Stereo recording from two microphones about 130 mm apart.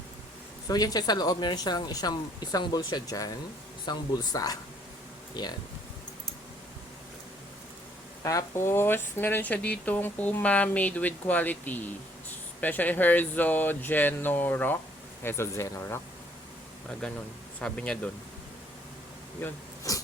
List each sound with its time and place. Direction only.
0.7 s speech: 30° left (ahead or behind)
8.2 s speech: 25° left (ahead or behind)
17.0 s speech: 5° left (ahead or behind)
19.4 s speech: 15° left (ahead or behind)
19.9 s speech: 25° left (ahead or behind)